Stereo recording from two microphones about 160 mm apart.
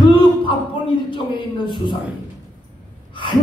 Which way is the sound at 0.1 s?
30° left (ahead or behind).